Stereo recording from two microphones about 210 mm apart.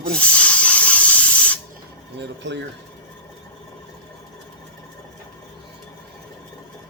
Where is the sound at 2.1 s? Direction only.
55° right (ahead or behind).